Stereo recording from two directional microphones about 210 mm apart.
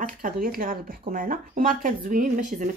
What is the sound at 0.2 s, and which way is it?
Speech, 45° right (ahead or behind).